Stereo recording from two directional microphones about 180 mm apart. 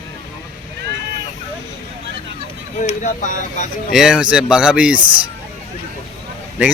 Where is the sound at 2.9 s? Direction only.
45° left (ahead or behind).